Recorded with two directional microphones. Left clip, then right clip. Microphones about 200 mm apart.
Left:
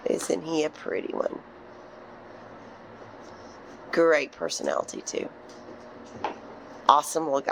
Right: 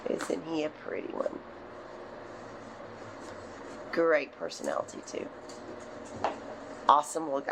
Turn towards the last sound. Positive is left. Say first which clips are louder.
# left 5 dB
turn(degrees=40)  # may be behind; listen again after turning